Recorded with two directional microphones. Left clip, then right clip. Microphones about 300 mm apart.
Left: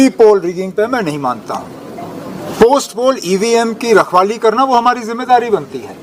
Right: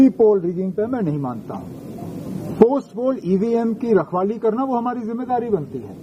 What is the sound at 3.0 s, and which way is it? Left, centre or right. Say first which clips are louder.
Speech: left 8 dB; centre.